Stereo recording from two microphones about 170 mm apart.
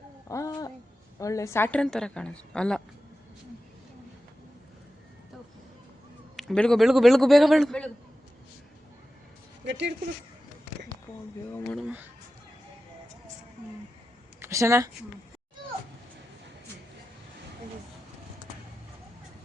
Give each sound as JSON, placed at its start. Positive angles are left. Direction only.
{"t": 0.3, "sound": "a sound", "side_deg": 20}
{"t": 1.2, "sound": "a woman's voice", "side_deg": 20}
{"t": 6.3, "sound": "a woman's voice", "side_deg": 5}
{"t": 9.6, "sound": "speech", "side_deg": -90}
{"t": 11.5, "sound": "speech", "side_deg": 10}
{"t": 11.8, "sound": "speech", "side_deg": -10}
{"t": 14.3, "sound": "speech", "side_deg": -15}